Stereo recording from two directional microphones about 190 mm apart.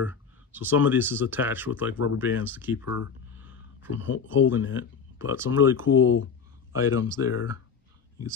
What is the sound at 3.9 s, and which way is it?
Speech, 90° left.